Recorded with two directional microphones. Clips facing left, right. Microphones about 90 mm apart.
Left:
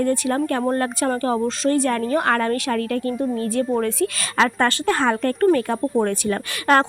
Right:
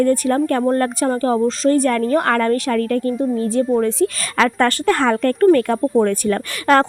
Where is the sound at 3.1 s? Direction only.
25° right (ahead or behind).